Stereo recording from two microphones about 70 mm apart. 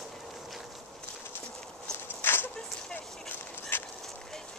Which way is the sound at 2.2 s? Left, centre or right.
Left.